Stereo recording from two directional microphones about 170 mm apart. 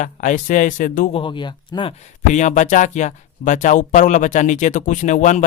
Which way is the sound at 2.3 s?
45° left (ahead or behind).